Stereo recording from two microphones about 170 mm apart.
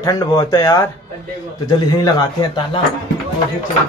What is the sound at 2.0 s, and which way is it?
Speech, 25° left (ahead or behind).